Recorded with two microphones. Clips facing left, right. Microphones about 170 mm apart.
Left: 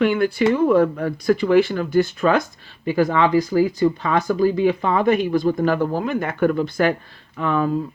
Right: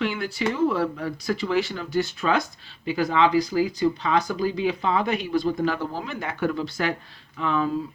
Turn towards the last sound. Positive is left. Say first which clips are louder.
# left 4 dB
turn(degrees=50)  # may be behind; listen again after turning